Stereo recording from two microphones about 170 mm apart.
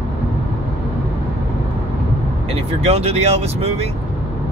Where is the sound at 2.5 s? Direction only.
35° right (ahead or behind).